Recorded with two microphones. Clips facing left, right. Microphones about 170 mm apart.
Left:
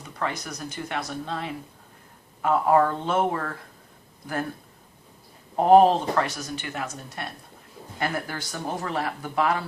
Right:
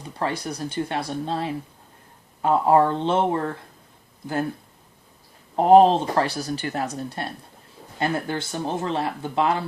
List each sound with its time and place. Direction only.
0.0 s speech: 30° right (ahead or behind)
5.5 s speech: 20° right (ahead or behind)
6.1 s speech: 35° right (ahead or behind)